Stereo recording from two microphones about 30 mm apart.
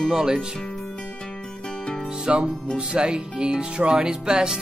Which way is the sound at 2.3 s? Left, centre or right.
Right.